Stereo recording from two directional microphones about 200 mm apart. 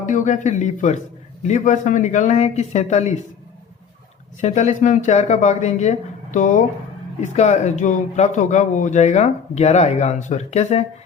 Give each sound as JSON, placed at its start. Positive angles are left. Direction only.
{"t": 0.0, "sound": "speech", "side_deg": 40}
{"t": 4.4, "sound": "speech", "side_deg": 35}